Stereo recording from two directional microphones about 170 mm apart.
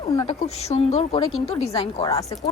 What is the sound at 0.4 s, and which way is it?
Speech, 40° left (ahead or behind).